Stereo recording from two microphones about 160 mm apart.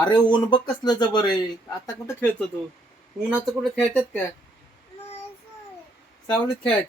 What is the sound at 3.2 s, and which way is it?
Speech, 5° right (ahead or behind).